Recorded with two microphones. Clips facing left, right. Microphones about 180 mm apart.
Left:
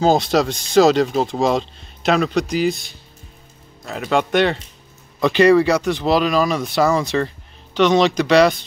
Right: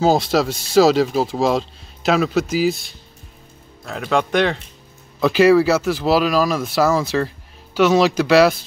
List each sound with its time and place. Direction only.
0.0 s speech: centre (ahead or behind)